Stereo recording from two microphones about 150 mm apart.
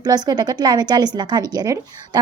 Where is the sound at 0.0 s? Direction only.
25° right (ahead or behind).